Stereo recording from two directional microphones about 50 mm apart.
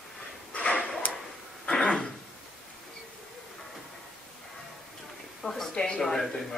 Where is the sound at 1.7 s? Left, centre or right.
Centre.